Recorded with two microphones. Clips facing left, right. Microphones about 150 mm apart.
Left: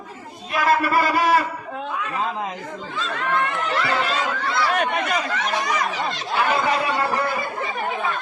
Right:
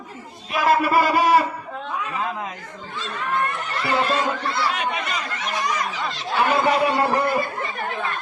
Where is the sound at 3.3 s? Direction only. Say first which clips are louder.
Left 2 dB; 90° left.